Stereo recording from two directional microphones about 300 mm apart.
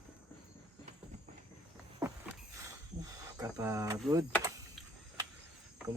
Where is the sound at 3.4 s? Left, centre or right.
Centre.